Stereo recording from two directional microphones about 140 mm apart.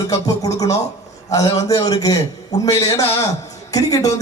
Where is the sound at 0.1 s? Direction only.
25° left (ahead or behind).